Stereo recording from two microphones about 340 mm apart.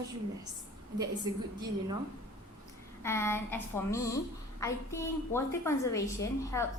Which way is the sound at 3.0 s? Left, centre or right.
Centre.